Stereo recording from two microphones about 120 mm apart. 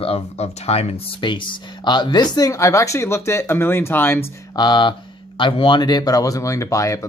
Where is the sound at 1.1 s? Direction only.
40° left (ahead or behind); by 4.2 s 20° left (ahead or behind).